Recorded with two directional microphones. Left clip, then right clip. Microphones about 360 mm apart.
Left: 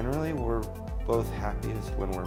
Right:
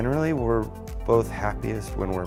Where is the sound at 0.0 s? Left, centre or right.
Right.